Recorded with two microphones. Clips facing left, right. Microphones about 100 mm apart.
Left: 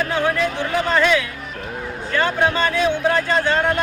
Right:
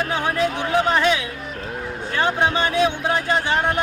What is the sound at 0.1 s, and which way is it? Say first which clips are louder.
Speech: left 1 dB; 20° right (ahead or behind).